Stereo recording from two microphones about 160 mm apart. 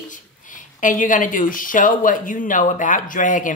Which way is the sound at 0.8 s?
55° left (ahead or behind).